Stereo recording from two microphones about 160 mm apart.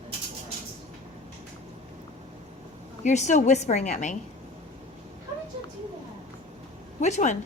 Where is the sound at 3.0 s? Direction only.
45° left (ahead or behind).